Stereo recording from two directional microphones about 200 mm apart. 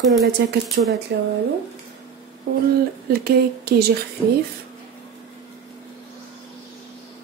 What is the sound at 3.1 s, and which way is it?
Speech, 50° right (ahead or behind).